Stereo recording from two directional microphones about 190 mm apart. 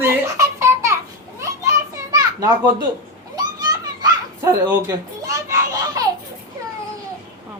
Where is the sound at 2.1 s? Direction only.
20° right (ahead or behind).